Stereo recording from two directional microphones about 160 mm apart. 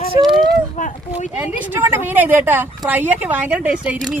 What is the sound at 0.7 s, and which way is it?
Speech, 50° left (ahead or behind).